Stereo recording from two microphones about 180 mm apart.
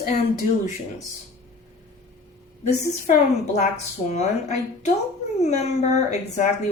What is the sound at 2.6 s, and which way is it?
Speech, 40° left (ahead or behind).